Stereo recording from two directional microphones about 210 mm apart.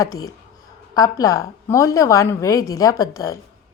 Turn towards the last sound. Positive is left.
turn(degrees=15)  # may be behind; listen again after turning